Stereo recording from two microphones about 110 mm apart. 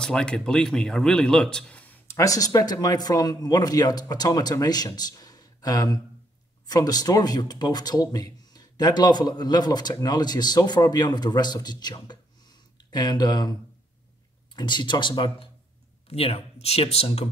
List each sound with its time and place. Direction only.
0.0 s speech: 5° left (ahead or behind)
2.1 s speech: 30° left (ahead or behind); by 15.5 s 45° left (ahead or behind)
16.1 s speech: 65° left (ahead or behind)